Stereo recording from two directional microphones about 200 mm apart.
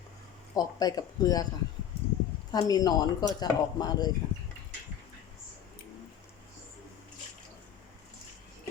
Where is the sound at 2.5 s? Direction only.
20° left (ahead or behind).